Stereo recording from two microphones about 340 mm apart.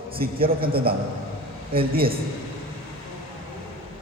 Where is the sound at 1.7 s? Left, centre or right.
Right.